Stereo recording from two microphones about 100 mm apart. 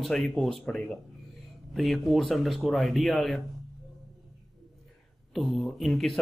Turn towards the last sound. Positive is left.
turn(degrees=5)  # may be behind; listen again after turning